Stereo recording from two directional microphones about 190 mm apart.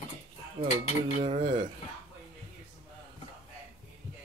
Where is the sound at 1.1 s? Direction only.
30° right (ahead or behind).